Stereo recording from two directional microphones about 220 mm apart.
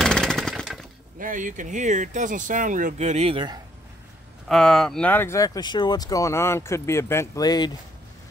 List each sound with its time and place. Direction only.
0.0 s jackhammer: 5° left (ahead or behind)
1.2 s speech: 35° right (ahead or behind); by 3.6 s 20° right (ahead or behind)
4.5 s speech: centre (ahead or behind); by 7.7 s 20° left (ahead or behind)